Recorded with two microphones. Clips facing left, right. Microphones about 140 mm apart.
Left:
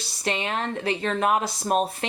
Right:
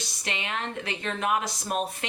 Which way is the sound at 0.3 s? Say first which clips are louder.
Left 6 dB; 35° left (ahead or behind).